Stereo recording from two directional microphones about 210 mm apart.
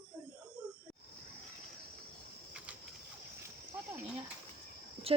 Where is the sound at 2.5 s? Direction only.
5° right (ahead or behind).